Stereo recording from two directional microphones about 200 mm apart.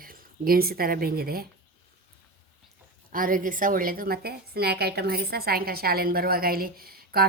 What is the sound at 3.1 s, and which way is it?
A woman's voice, 45° right (ahead or behind).